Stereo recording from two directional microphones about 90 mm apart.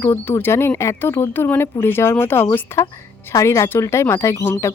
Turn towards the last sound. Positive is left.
turn(degrees=30)  # may be behind; listen again after turning